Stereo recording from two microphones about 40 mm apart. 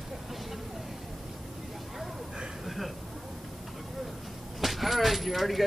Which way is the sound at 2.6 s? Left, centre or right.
Centre.